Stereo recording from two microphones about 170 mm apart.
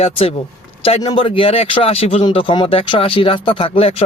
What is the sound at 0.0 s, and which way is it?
Speech, 35° left (ahead or behind).